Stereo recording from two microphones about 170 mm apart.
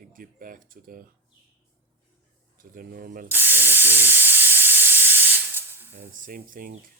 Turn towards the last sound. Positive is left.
turn(degrees=-55)  # may be behind; listen again after turning